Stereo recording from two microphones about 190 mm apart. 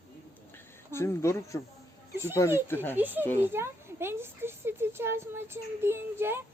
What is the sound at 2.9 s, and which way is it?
Speech, 10° right (ahead or behind).